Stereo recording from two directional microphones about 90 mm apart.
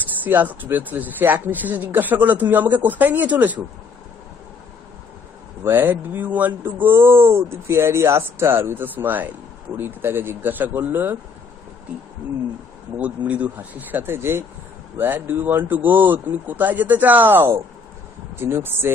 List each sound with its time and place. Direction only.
0.2 s speech: 20° right (ahead or behind)
5.6 s speech: 25° right (ahead or behind)
12.9 s speech: 15° right (ahead or behind)